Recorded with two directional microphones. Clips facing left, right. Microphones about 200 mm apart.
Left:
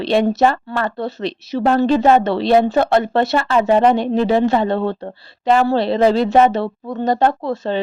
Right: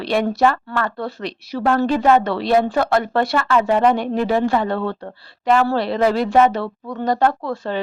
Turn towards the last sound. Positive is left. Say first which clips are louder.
# left 3 dB
turn(degrees=25)  # may be behind; listen again after turning